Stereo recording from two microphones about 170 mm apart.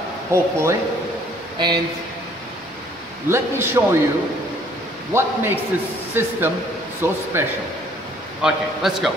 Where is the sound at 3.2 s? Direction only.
15° right (ahead or behind).